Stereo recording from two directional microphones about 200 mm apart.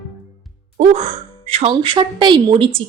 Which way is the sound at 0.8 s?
30° right (ahead or behind).